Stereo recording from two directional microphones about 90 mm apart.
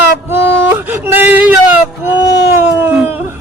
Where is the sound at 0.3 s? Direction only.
25° right (ahead or behind).